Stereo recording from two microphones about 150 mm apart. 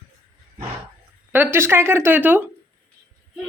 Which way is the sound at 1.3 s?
15° right (ahead or behind).